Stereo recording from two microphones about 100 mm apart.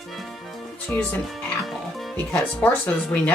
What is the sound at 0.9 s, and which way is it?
Speech, 15° left (ahead or behind).